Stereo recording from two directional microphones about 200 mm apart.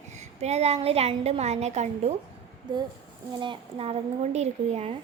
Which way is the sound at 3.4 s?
25° right (ahead or behind).